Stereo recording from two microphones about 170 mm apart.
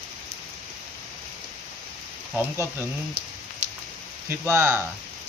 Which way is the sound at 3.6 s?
45° right (ahead or behind).